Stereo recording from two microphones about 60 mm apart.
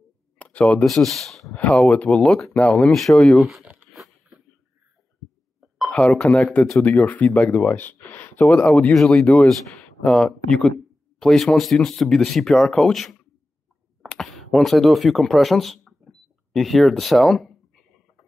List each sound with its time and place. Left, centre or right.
0.4 s a sound: left
0.8 s speech: centre
1.8 s speech: centre
2.9 s speech: centre
3.9 s a sound: centre
5.9 s speech: centre
8.5 s speech: centre
8.9 s speech: centre
9.2 s speech: left; by 17.5 s centre